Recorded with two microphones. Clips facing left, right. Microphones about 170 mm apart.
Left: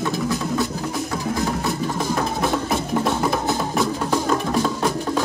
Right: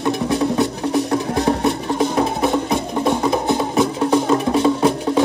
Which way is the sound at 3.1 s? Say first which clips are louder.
Right 7 dB; 20° right (ahead or behind).